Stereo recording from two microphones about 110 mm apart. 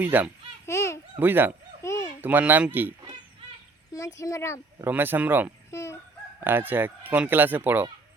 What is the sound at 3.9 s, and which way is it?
Speech, 30° left (ahead or behind).